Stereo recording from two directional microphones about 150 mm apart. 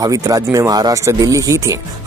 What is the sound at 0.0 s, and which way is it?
Speech, 20° right (ahead or behind).